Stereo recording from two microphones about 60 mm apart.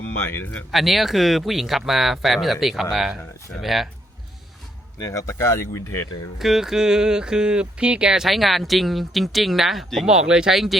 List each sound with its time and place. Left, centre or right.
0.0 s speech: left
0.7 s speech: centre
5.0 s speech: left
6.4 s speech: centre
8.2 s speech: centre
10.1 s speech: centre